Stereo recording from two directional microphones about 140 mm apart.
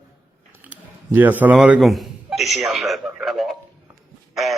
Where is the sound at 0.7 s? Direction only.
15° right (ahead or behind).